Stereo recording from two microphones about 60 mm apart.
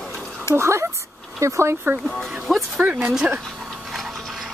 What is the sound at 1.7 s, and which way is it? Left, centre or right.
Speech, right.